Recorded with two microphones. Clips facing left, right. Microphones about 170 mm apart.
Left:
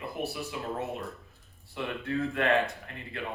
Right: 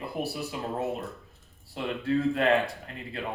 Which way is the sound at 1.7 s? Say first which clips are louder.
Right 5 dB; 30° right (ahead or behind).